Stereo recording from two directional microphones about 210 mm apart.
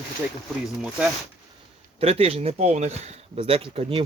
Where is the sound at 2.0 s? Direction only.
30° right (ahead or behind).